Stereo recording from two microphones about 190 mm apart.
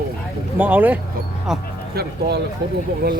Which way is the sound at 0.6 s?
10° right (ahead or behind).